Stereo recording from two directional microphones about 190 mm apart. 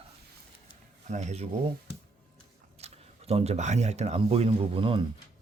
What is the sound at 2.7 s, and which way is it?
Speech, 35° right (ahead or behind).